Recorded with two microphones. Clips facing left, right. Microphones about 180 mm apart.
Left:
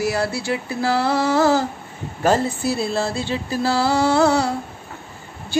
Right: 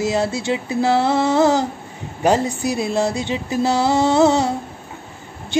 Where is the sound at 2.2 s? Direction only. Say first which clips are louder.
Right 1 dB; 15° right (ahead or behind).